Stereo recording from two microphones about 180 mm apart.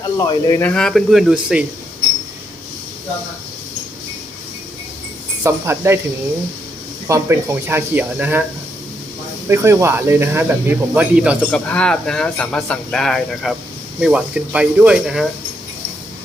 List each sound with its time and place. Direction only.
0.0 s speech: 20° left (ahead or behind)
0.6 s speech: 5° left (ahead or behind)
5.4 s speech: 15° right (ahead or behind)
7.1 s speech: 15° right (ahead or behind)
9.5 s speech: 15° right (ahead or behind)
11.7 s speech: 5° left (ahead or behind)